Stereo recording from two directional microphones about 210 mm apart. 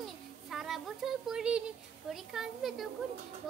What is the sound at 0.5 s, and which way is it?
A child's voice, centre (ahead or behind).